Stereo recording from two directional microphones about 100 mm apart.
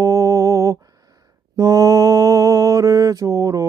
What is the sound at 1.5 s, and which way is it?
Mantra, 35° right (ahead or behind).